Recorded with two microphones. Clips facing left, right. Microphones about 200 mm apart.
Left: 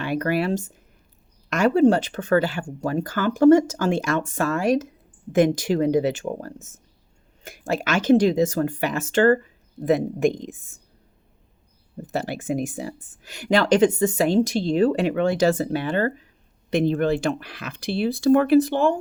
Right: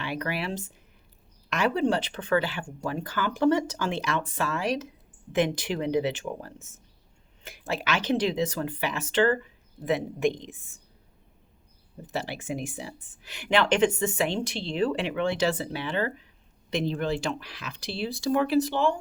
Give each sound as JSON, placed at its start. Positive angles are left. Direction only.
{"t": 0.0, "sound": "speech", "side_deg": 45}
{"t": 12.0, "sound": "speech", "side_deg": 45}